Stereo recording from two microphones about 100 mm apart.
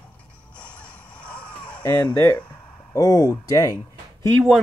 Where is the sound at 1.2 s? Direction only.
10° left (ahead or behind).